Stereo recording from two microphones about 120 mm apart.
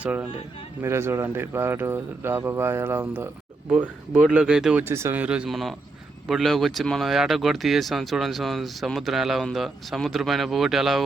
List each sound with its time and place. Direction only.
0.0 s speech: 10° right (ahead or behind)
4.8 s speech: 20° right (ahead or behind)
5.2 s speech: 10° right (ahead or behind)